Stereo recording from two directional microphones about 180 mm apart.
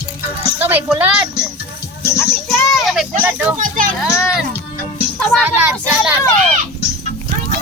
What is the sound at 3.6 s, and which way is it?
Speech, 45° right (ahead or behind).